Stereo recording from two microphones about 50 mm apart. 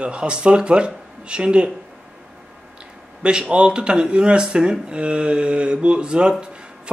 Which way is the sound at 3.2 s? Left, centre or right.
Centre.